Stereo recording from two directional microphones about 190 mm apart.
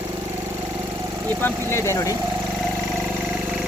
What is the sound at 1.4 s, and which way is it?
Speech, 15° left (ahead or behind).